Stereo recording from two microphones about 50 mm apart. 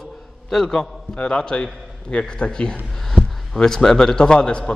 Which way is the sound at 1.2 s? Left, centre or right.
Centre.